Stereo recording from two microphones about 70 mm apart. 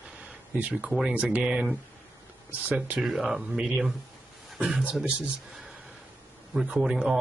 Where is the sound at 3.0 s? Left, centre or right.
Centre.